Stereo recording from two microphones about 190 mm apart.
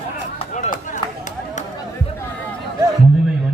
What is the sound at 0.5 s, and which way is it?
Chop, 40° left (ahead or behind).